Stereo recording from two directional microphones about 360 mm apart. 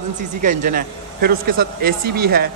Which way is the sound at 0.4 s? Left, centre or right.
Right.